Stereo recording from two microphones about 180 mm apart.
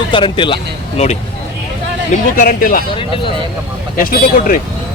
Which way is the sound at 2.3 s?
50° left (ahead or behind).